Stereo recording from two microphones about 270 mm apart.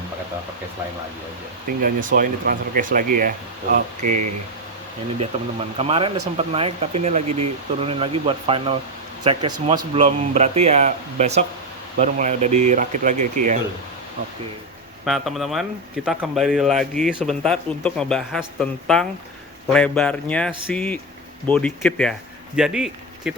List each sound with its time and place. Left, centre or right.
1.8 s speech: right
5.2 s speech: right
7.3 s speech: right
7.8 s speech: right
13.4 s speech: right
15.0 s speech: centre